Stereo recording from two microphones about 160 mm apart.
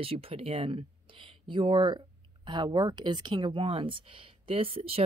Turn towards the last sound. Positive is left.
turn(degrees=-35)  # may be behind; listen again after turning